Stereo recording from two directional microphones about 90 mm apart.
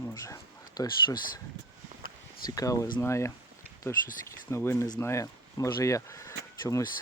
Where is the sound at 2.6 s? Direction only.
40° left (ahead or behind).